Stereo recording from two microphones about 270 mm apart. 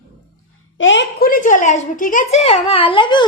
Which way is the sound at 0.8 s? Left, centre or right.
Left.